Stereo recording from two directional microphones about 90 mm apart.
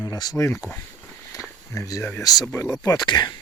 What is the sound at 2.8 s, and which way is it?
Speech, 40° left (ahead or behind).